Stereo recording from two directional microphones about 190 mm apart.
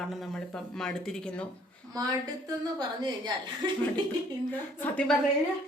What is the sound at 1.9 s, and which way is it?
Speech, 20° right (ahead or behind).